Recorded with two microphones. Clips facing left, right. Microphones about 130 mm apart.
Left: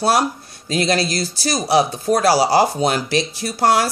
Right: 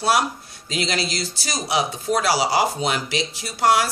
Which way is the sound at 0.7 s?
40° left (ahead or behind).